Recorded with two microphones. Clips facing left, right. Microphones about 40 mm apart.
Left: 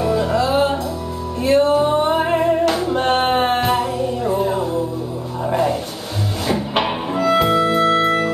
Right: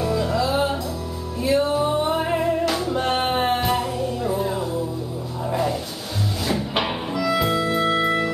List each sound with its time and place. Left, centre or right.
0.0 s music: centre
1.4 s music: left
2.0 s music: left
3.0 s music: left
3.7 s music: centre
7.2 s music: left
7.8 s music: left